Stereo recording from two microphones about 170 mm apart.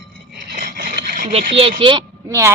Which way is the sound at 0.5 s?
55° right (ahead or behind).